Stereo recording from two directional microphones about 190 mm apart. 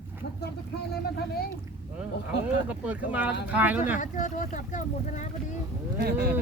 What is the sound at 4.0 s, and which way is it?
Speech, 40° left (ahead or behind).